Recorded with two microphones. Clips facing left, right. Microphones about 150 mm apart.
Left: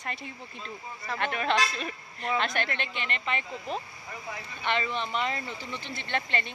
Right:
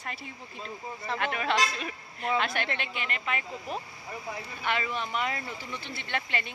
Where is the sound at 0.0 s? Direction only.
5° right (ahead or behind).